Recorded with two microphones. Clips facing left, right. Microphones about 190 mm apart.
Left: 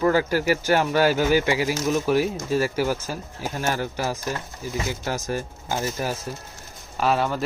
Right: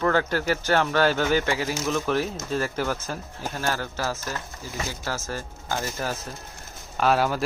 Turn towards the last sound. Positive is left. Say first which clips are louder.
# even
turn(degrees=0)  # may be behind; listen again after turning